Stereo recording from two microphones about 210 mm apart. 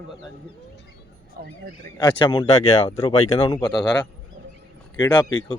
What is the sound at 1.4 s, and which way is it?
Speech, 45° right (ahead or behind).